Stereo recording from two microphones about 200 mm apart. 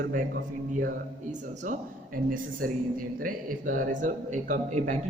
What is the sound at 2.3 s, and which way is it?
Speech, 45° right (ahead or behind).